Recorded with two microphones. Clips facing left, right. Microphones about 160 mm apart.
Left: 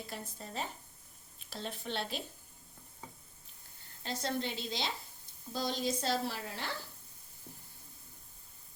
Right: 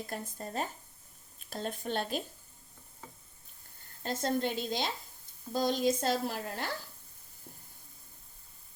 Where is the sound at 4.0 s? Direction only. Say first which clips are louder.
Right 5 dB; 50° right (ahead or behind).